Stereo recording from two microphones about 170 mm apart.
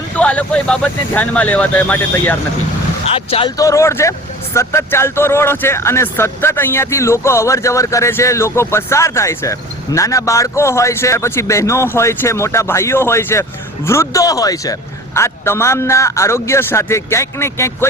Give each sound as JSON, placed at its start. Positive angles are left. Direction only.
{"t": 0.2, "sound": "speech", "side_deg": 5}
{"t": 3.1, "sound": "speech", "side_deg": 35}
{"t": 3.6, "sound": "speech", "side_deg": 20}